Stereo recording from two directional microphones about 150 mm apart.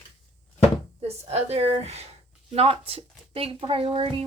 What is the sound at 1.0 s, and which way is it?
A woman's voice, 45° right (ahead or behind).